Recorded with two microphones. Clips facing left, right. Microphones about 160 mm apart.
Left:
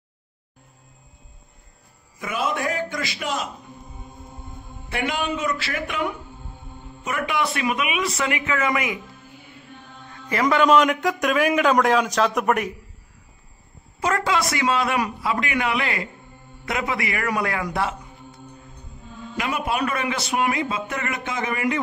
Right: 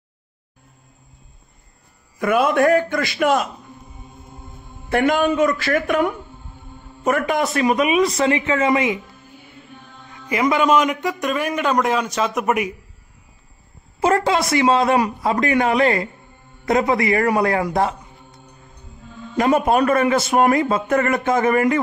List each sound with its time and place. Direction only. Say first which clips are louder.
2.1 s a man's voice: right 9 dB; 55° right (ahead or behind)
4.8 s a man's voice: right 9 dB; 50° right (ahead or behind); by 9.0 s 25° right (ahead or behind)
10.2 s a man's voice: right 1 dB; 10° right (ahead or behind)
14.0 s a man's voice: right 5 dB; 30° right (ahead or behind)
19.3 s a man's voice: right 9 dB; 45° right (ahead or behind)